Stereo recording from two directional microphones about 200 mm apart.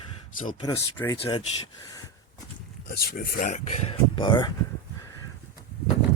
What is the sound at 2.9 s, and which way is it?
Speech, 50° left (ahead or behind).